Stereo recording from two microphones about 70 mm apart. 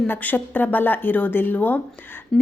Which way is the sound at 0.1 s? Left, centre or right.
Left.